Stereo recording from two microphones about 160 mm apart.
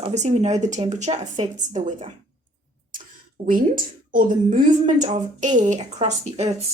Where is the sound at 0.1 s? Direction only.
45° right (ahead or behind).